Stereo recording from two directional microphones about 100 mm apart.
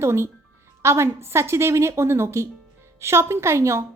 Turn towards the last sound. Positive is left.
turn(degrees=-25)  # may be behind; listen again after turning